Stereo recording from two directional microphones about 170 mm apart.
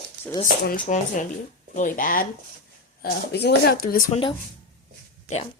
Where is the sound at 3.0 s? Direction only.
65° left (ahead or behind).